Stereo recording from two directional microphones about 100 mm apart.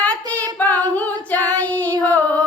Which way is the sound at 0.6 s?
20° left (ahead or behind).